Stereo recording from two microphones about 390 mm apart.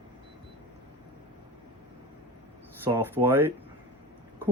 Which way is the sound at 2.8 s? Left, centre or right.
Centre.